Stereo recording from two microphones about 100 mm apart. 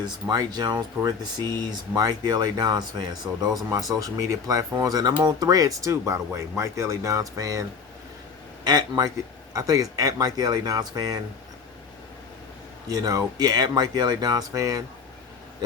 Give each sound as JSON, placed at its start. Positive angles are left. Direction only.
{"t": 0.0, "sound": "speech", "side_deg": -45}
{"t": 8.6, "sound": "speech", "side_deg": -45}
{"t": 12.9, "sound": "speech", "side_deg": -40}